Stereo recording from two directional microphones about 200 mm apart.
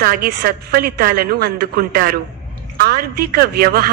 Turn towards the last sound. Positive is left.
turn(degrees=-50)  # may be behind; listen again after turning